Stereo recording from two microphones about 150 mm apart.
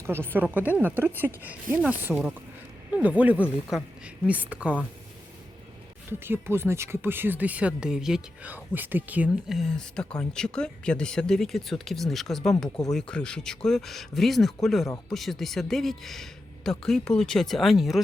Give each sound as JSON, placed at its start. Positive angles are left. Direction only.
{"t": 0.0, "sound": "a woman's voice", "side_deg": -15}
{"t": 6.1, "sound": "speech", "side_deg": -15}
{"t": 9.6, "sound": "speech", "side_deg": 5}